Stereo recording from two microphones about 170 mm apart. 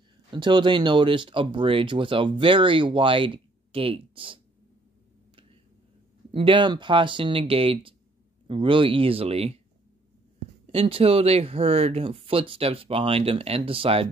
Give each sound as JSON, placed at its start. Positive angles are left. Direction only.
{"t": 0.3, "sound": "speech", "side_deg": -25}
{"t": 6.3, "sound": "speech", "side_deg": -30}
{"t": 10.7, "sound": "speech", "side_deg": -35}